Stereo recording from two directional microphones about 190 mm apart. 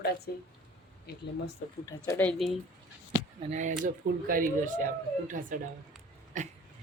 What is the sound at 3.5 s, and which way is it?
Speech, 40° right (ahead or behind).